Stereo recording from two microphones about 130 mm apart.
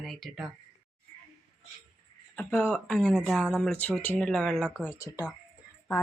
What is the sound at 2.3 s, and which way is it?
Speech, 10° left (ahead or behind).